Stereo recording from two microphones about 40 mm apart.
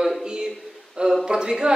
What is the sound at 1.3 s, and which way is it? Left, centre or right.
Speech, right.